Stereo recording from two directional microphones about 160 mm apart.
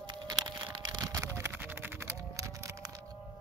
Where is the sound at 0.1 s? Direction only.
25° right (ahead or behind).